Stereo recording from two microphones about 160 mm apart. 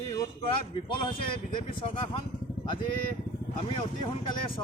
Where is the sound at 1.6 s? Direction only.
30° left (ahead or behind).